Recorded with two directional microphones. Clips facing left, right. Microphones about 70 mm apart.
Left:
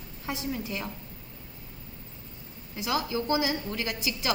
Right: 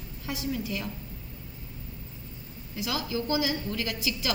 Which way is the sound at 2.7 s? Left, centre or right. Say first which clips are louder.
Left 2 dB; left.